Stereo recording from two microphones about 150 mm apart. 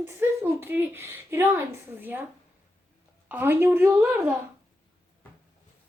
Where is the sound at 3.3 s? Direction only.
15° right (ahead or behind).